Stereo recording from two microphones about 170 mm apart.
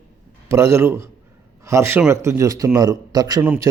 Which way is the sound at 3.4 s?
10° right (ahead or behind).